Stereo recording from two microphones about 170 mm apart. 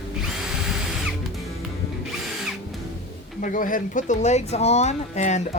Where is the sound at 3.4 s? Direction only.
50° left (ahead or behind).